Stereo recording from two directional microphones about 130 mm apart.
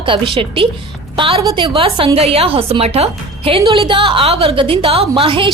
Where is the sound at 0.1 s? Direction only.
45° right (ahead or behind).